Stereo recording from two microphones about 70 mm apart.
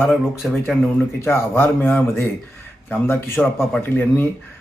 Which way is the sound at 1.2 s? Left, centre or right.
Left.